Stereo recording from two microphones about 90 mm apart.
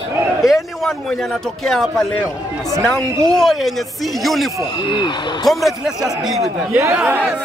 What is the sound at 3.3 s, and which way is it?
A man's voice, 5° left (ahead or behind).